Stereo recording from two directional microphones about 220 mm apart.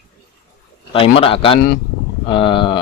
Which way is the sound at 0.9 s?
25° left (ahead or behind).